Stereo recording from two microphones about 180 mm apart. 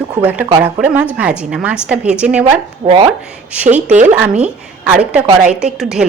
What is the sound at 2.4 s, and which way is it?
Speech, 30° right (ahead or behind).